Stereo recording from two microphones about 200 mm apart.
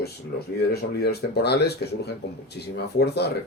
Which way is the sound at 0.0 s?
50° left (ahead or behind).